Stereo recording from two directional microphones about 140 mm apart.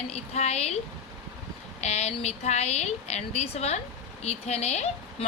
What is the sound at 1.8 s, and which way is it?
A woman's voice, 50° left (ahead or behind).